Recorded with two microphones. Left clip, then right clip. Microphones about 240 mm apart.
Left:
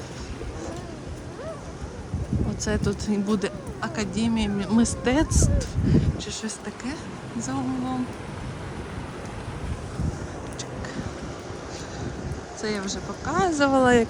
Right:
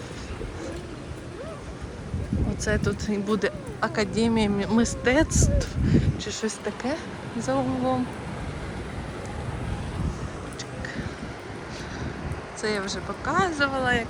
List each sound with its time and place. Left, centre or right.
2.6 s speech: centre
12.6 s speech: centre